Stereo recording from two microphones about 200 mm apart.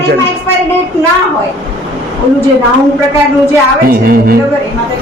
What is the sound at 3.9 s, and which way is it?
Speech, 45° right (ahead or behind).